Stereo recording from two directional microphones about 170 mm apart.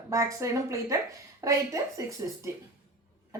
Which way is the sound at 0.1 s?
20° right (ahead or behind).